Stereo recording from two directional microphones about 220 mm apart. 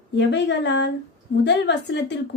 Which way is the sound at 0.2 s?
55° left (ahead or behind).